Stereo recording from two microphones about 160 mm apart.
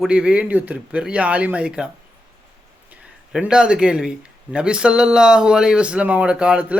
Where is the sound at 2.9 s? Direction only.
5° right (ahead or behind).